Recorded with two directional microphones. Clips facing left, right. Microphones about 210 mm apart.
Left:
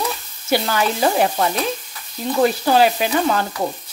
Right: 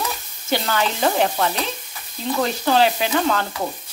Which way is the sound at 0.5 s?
10° left (ahead or behind).